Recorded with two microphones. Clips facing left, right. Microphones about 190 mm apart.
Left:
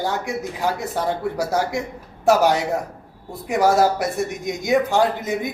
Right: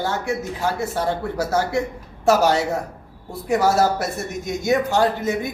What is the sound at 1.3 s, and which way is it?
Speech, 15° left (ahead or behind).